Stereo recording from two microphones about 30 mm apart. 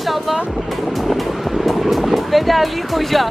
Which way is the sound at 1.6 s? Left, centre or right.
Centre.